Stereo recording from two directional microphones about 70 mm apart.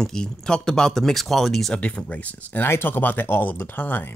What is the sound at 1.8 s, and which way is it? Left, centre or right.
Speech, centre.